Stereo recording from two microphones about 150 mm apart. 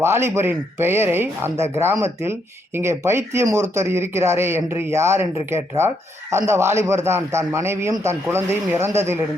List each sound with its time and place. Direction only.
0.0 s speech: 15° right (ahead or behind)